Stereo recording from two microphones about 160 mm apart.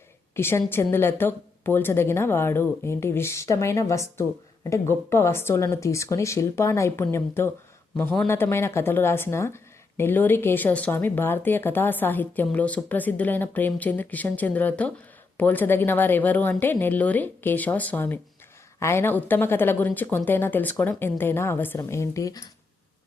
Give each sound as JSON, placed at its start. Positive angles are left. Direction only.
{"t": 0.3, "sound": "a woman's voice", "side_deg": 15}